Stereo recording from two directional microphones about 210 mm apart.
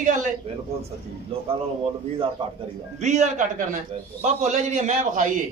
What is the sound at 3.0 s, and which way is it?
A man's voice, 35° right (ahead or behind).